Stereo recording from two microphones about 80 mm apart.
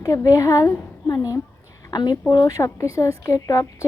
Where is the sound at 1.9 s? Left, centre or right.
Left.